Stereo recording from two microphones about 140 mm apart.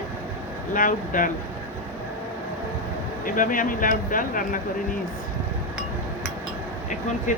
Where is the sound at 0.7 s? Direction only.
75° left (ahead or behind).